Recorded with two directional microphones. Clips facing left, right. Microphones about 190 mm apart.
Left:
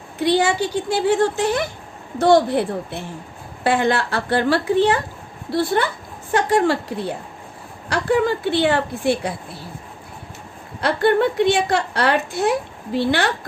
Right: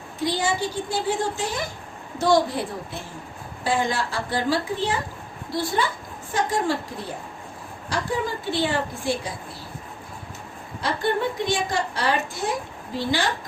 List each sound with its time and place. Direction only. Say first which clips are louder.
0.2 s a woman's voice: left 6 dB; 65° left (ahead or behind)
7.9 s a woman's voice: left 8 dB; 65° left (ahead or behind)
10.8 s a woman's voice: left 7 dB; 65° left (ahead or behind)